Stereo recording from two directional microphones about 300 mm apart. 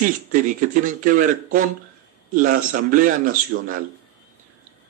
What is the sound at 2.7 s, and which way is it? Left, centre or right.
Speech, right.